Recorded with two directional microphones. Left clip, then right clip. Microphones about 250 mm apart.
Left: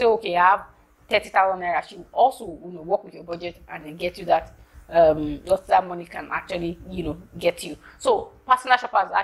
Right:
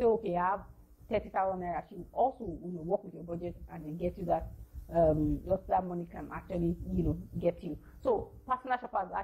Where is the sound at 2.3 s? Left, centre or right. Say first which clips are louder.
Left 6 dB; left.